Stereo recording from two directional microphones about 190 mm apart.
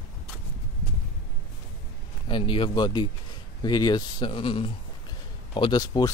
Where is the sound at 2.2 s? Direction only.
25° left (ahead or behind).